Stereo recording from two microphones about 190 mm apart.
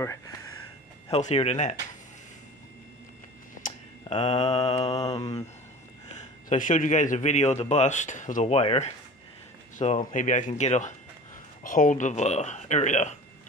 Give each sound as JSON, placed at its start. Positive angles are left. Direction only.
{"t": 1.1, "sound": "a man's voice", "side_deg": 35}
{"t": 3.6, "sound": "mantra", "side_deg": 30}
{"t": 6.1, "sound": "a man's voice", "side_deg": 40}